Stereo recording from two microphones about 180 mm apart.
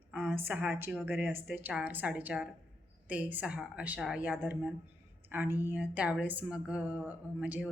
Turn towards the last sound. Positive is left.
turn(degrees=-5)  # may be behind; listen again after turning